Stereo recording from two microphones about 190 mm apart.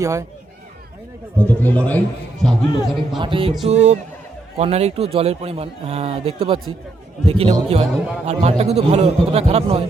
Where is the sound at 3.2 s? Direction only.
30° right (ahead or behind).